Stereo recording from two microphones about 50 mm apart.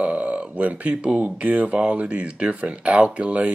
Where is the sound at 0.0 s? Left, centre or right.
Right.